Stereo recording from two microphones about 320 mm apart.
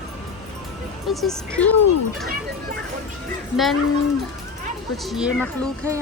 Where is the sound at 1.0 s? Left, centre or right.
Centre.